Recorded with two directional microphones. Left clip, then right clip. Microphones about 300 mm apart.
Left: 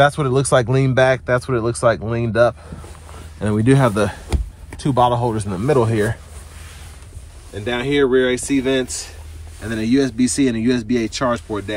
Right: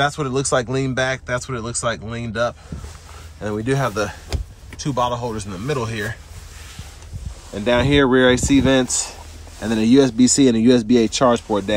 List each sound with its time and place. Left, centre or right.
0.0 s speech: left
3.6 s a man's voice: left
7.6 s speech: centre